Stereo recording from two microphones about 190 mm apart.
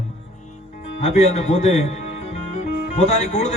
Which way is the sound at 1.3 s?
35° left (ahead or behind).